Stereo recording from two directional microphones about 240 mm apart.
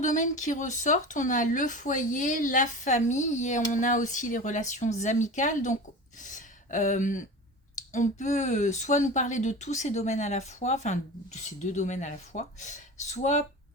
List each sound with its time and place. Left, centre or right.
0.0 s a woman's voice: left